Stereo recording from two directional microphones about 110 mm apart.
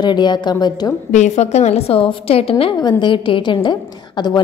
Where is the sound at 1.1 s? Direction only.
90° left; by 2.5 s 60° left (ahead or behind).